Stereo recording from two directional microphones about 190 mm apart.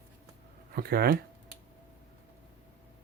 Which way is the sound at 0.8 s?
55° right (ahead or behind).